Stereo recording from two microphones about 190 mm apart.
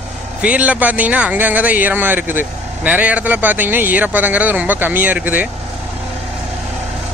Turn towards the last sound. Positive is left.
turn(degrees=-10)  # may be behind; listen again after turning